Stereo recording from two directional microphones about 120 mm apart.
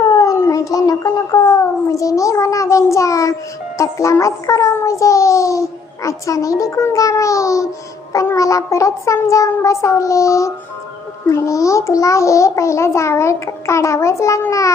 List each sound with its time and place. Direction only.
0.2 s a child's voice: 25° left (ahead or behind)